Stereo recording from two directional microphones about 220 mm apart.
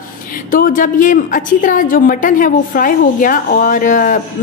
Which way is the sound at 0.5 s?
40° left (ahead or behind).